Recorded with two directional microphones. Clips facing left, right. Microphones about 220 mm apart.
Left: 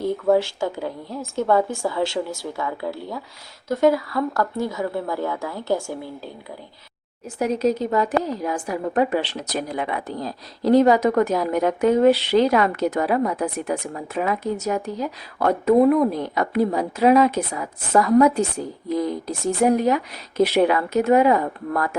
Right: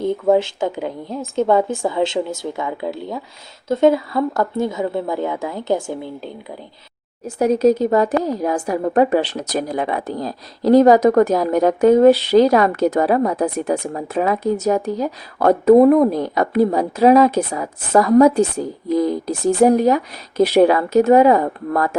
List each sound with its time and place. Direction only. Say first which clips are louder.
0.0 s a woman's voice: right 3 dB; 20° right (ahead or behind)
7.3 s a woman's voice: right 6 dB; 40° right (ahead or behind)